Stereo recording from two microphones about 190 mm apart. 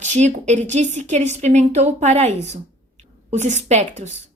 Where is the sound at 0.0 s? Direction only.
40° right (ahead or behind).